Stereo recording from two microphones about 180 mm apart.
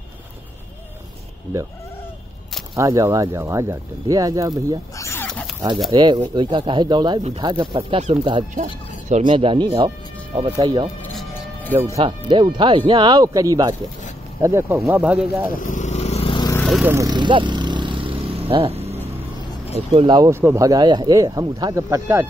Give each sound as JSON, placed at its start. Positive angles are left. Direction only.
{"t": 2.7, "sound": "speech", "side_deg": -20}
{"t": 4.9, "sound": "a sound", "side_deg": 15}
{"t": 5.9, "sound": "speech", "side_deg": -25}
{"t": 12.0, "sound": "speech", "side_deg": -25}
{"t": 15.6, "sound": "vehicle", "side_deg": 45}
{"t": 16.5, "sound": "vehicle", "side_deg": 5}
{"t": 16.8, "sound": "speech", "side_deg": -15}
{"t": 17.1, "sound": "vehicle", "side_deg": -25}
{"t": 19.7, "sound": "speech", "side_deg": -35}
{"t": 20.2, "sound": "speech", "side_deg": -15}